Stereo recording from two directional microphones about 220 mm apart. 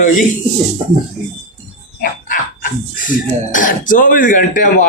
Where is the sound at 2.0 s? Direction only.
40° left (ahead or behind).